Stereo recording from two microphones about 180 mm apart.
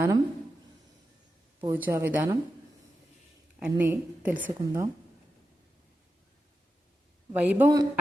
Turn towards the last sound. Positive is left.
turn(degrees=-15)  # may be behind; listen again after turning